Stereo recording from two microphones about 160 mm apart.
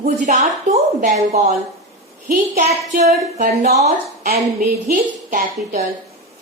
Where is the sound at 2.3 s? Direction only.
55° right (ahead or behind).